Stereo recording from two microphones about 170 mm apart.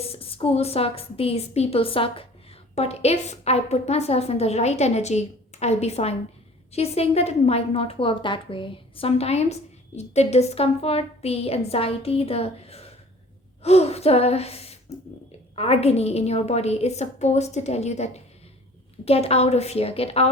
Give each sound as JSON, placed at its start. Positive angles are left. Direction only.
{"t": 0.0, "sound": "a woman's voice", "side_deg": 35}